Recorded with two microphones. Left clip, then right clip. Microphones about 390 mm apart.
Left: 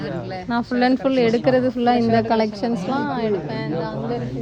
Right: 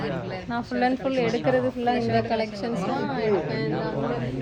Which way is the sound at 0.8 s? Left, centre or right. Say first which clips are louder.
Left 5 dB; left.